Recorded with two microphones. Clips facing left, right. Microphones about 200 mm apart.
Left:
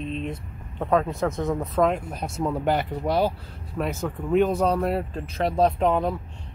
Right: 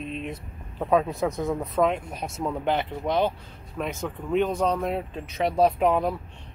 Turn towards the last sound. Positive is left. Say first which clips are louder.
# even
turn(degrees=0)  # may be behind; listen again after turning